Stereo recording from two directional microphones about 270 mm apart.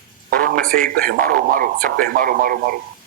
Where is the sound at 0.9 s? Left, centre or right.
Right.